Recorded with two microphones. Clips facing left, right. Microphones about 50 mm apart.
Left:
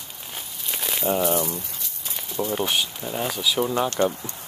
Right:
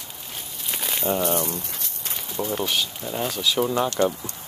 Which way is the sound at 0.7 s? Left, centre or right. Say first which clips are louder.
Even; centre.